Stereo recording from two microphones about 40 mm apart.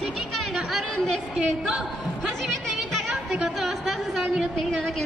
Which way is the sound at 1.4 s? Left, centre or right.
Right.